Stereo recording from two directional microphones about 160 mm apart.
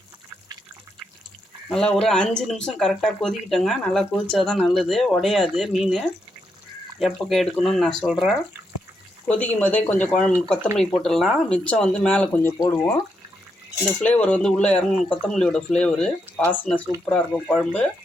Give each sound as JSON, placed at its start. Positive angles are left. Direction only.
{"t": 1.7, "sound": "speech", "side_deg": 5}
{"t": 9.2, "sound": "speech", "side_deg": 10}
{"t": 14.0, "sound": "speech", "side_deg": 10}